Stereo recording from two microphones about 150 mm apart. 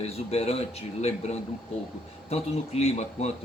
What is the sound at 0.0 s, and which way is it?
Speech, 45° left (ahead or behind).